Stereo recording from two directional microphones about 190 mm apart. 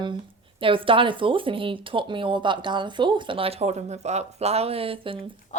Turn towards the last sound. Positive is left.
turn(degrees=-30)  # may be behind; listen again after turning